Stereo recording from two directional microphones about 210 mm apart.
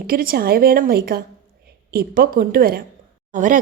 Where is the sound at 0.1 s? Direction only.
45° right (ahead or behind).